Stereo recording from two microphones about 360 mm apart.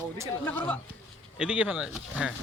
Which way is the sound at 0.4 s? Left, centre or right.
Centre.